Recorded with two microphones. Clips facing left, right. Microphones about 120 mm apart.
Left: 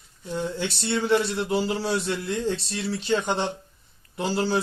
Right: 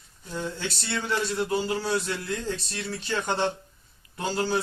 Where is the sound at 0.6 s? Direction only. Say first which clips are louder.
Left 5 dB; 25° left (ahead or behind).